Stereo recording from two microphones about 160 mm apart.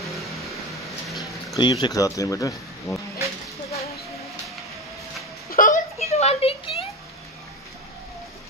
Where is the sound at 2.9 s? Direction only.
20° left (ahead or behind).